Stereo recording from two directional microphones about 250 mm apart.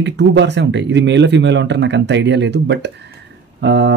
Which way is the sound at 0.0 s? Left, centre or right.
Right.